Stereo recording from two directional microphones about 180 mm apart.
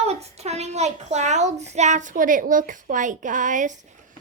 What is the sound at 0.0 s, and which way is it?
A child's voice, 35° right (ahead or behind).